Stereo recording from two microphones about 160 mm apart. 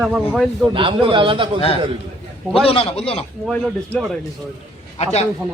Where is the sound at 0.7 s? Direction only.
30° right (ahead or behind).